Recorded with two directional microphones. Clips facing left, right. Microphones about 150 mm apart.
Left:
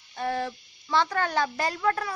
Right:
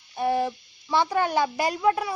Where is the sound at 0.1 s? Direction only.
15° right (ahead or behind).